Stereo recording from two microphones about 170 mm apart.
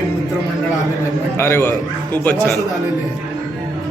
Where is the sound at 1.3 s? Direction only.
15° left (ahead or behind).